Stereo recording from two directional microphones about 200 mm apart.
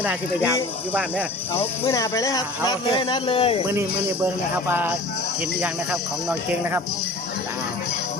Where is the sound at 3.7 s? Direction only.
10° right (ahead or behind).